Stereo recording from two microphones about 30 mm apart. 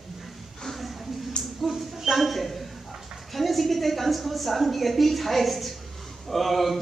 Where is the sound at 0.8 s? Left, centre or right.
Centre.